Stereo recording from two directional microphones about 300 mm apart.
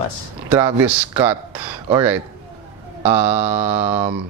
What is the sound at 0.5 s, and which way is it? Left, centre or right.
Speech, centre.